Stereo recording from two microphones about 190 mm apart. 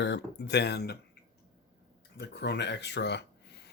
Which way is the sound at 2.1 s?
60° left (ahead or behind).